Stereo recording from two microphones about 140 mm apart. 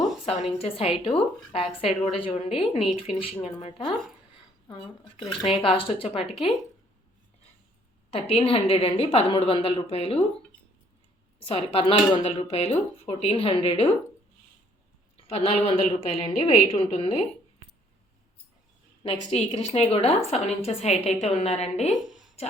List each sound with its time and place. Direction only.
0.6 s a woman's voice: 45° left (ahead or behind)
8.1 s a woman's voice: 45° left (ahead or behind)
11.4 s a woman's voice: 40° left (ahead or behind)
15.3 s a woman's voice: 50° left (ahead or behind)
19.0 s a woman's voice: 45° left (ahead or behind)
22.0 s a sound: 5° right (ahead or behind)